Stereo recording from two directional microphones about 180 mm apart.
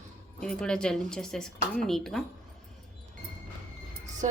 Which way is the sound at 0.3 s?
5° left (ahead or behind).